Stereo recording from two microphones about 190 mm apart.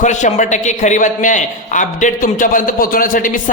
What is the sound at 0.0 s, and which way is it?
A man's voice, 40° left (ahead or behind).